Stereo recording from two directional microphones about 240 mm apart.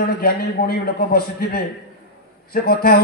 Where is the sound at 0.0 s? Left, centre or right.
Left.